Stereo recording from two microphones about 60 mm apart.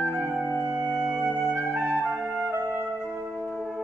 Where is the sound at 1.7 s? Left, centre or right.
Right.